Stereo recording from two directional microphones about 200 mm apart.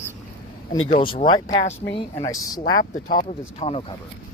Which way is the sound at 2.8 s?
45° left (ahead or behind).